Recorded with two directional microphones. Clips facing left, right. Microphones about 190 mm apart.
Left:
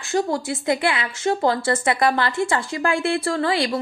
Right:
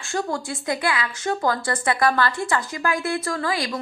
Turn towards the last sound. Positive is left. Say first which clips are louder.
# left 4 dB
turn(degrees=30)  # may be behind; listen again after turning